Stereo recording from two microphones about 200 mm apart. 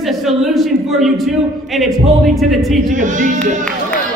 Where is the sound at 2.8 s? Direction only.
40° right (ahead or behind).